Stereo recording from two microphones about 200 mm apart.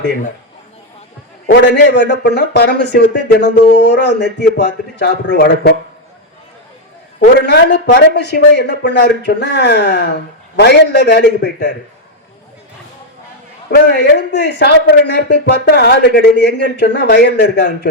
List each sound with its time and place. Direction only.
1.5 s a man's voice: 55° left (ahead or behind)
7.3 s a man's voice: 55° left (ahead or behind)
13.7 s a man's voice: 55° left (ahead or behind)